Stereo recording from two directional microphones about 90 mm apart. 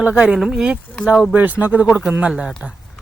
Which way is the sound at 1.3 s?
20° right (ahead or behind).